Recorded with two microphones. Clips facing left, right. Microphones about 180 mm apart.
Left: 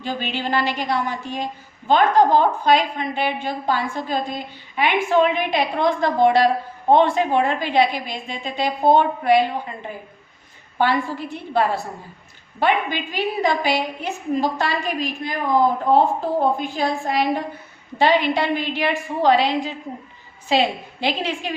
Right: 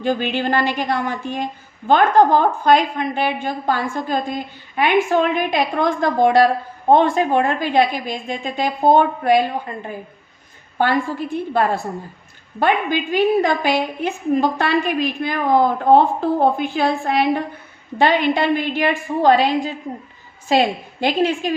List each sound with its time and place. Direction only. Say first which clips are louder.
0.0 s a woman's voice: right 6 dB; 50° right (ahead or behind)
11.5 s a woman's voice: even; 50° right (ahead or behind)